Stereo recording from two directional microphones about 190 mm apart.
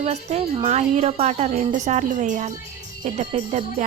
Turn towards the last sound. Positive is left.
turn(degrees=-35)  # may be behind; listen again after turning